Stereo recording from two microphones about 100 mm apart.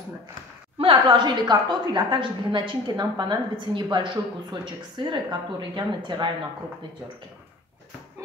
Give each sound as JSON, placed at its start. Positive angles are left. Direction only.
{"t": 0.7, "sound": "a woman's voice", "side_deg": -60}